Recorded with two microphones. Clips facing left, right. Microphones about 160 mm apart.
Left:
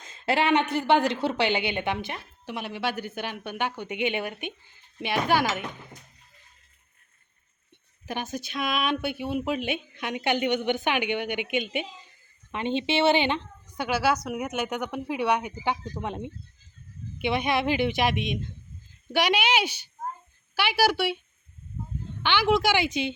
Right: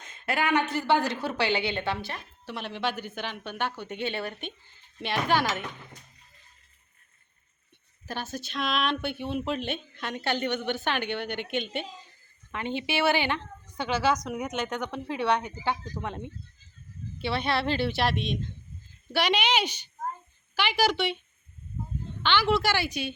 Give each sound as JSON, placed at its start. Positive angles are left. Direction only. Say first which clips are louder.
{"t": 0.0, "sound": "a sound", "louder": "left 4 dB", "side_deg": 30}
{"t": 0.7, "sound": "speech", "louder": "left 3 dB", "side_deg": 20}
{"t": 8.0, "sound": "speech", "louder": "left 3 dB", "side_deg": 15}
{"t": 22.2, "sound": "speech", "louder": "left 2 dB", "side_deg": 10}